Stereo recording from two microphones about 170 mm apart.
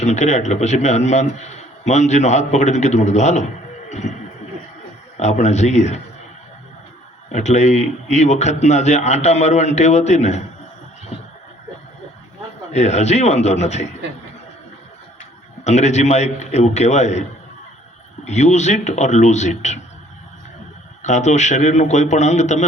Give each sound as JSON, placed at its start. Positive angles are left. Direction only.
{"t": 0.0, "sound": "a man's voice", "side_deg": 45}
{"t": 3.8, "sound": "music", "side_deg": 45}
{"t": 5.1, "sound": "a man's voice", "side_deg": 40}
{"t": 7.3, "sound": "a man's voice", "side_deg": 40}
{"t": 12.7, "sound": "a man's voice", "side_deg": 40}
{"t": 15.6, "sound": "a man's voice", "side_deg": 40}
{"t": 18.3, "sound": "a man's voice", "side_deg": 40}
{"t": 21.0, "sound": "a man's voice", "side_deg": 45}